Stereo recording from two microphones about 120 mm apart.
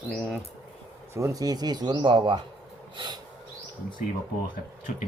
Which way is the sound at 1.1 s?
25° right (ahead or behind).